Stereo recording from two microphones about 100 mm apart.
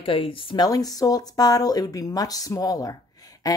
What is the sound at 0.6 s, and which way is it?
A woman's voice, 40° left (ahead or behind).